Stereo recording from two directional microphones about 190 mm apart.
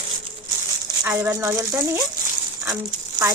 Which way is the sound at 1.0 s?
15° right (ahead or behind).